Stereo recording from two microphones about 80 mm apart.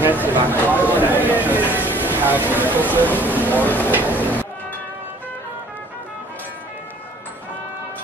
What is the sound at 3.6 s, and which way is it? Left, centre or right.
Speech, left.